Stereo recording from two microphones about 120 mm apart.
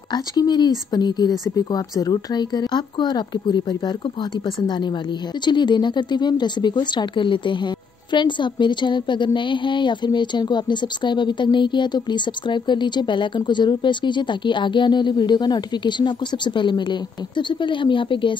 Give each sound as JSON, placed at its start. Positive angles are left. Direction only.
{"t": 0.1, "sound": "speech", "side_deg": 35}